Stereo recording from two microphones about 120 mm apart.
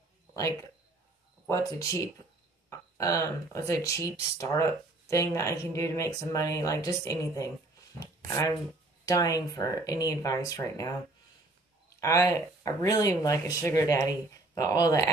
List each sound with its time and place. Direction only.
1.5 s speech: 30° left (ahead or behind)
12.0 s speech: 25° left (ahead or behind)